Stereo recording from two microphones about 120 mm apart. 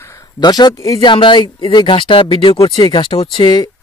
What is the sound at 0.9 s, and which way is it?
Speech, 40° left (ahead or behind).